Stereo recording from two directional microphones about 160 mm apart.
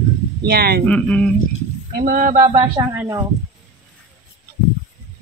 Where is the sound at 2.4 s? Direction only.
30° right (ahead or behind).